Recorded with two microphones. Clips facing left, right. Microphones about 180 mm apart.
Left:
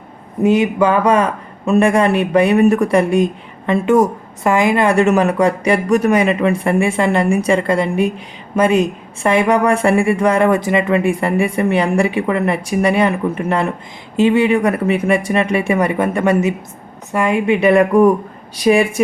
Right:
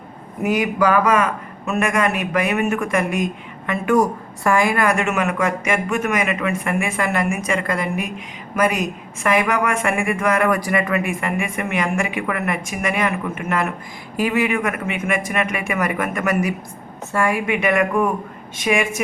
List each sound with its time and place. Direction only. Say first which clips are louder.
0.4 s a woman's voice: left 5 dB; 25° left (ahead or behind)